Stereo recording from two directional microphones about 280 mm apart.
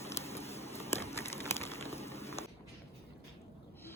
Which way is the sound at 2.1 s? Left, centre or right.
Left.